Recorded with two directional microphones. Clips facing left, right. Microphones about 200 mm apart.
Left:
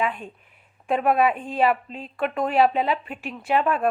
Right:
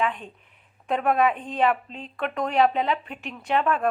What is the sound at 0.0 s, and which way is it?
A woman's voice, 10° left (ahead or behind).